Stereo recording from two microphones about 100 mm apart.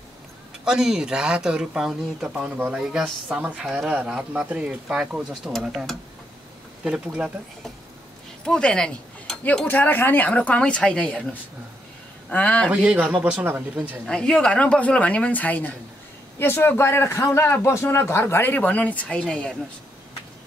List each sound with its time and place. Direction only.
0.7 s speech: 5° right (ahead or behind)
6.8 s speech: 10° right (ahead or behind)
8.5 s a woman's voice: 10° left (ahead or behind)
12.3 s a woman's voice: 15° left (ahead or behind)
12.6 s speech: 10° right (ahead or behind)
14.0 s a woman's voice: 5° left (ahead or behind)